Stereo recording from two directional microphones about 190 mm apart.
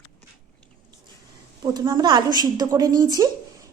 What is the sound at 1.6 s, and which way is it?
A woman's voice, 20° right (ahead or behind).